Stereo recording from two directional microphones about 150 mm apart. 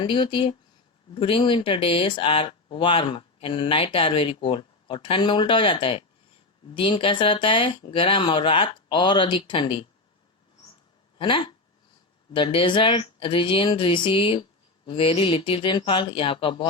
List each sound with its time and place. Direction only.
0.0 s speech: 35° left (ahead or behind)
11.2 s speech: 35° left (ahead or behind)